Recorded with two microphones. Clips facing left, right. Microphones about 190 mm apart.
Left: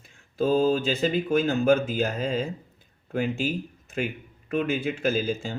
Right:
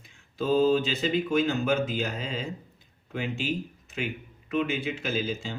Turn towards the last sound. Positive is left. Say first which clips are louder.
# left 4 dB
turn(degrees=50)  # may be behind; listen again after turning